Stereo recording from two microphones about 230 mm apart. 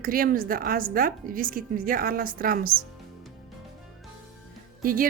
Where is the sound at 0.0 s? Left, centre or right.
Right.